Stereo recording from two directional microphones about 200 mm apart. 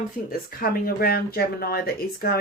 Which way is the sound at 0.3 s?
45° left (ahead or behind).